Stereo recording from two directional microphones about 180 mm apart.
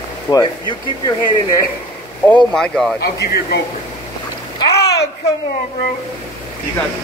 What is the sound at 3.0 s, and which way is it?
Speech, 65° left (ahead or behind).